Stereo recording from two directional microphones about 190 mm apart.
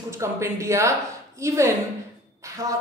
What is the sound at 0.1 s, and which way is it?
Speech, 15° right (ahead or behind).